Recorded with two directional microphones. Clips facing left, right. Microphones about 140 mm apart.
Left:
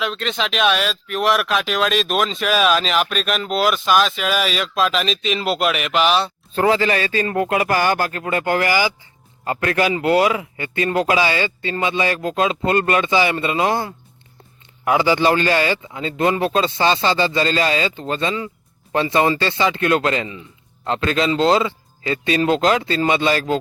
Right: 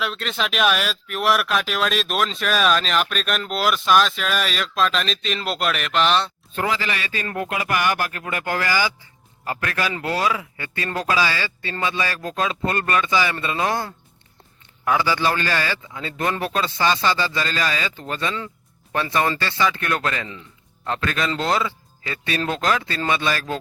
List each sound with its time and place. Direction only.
0.0 s speech: 5° right (ahead or behind)
6.6 s speech: 35° left (ahead or behind)
19.4 s speech: 20° left (ahead or behind)